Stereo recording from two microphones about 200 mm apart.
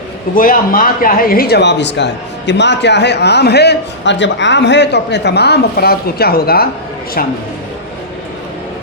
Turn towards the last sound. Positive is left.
turn(degrees=45)  # may be behind; listen again after turning